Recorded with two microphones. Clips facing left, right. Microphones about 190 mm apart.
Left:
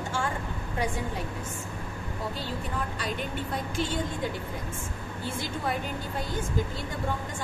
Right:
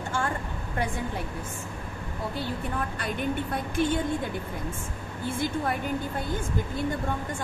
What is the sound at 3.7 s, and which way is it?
Speech, 55° right (ahead or behind).